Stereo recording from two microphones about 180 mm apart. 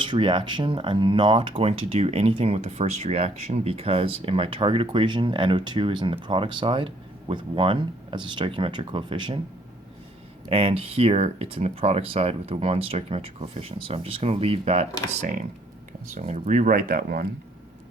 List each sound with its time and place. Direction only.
0.0 s speech: 30° right (ahead or behind)
10.4 s speech: 30° right (ahead or behind); by 17.2 s 55° right (ahead or behind)